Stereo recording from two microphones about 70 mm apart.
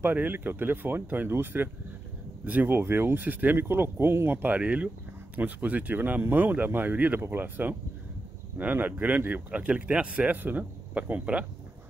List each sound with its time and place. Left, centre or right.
0.0 s speech: right